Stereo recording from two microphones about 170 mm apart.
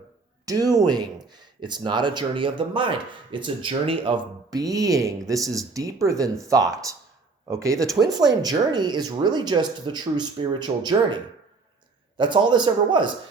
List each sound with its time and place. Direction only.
0.4 s speech: 20° right (ahead or behind)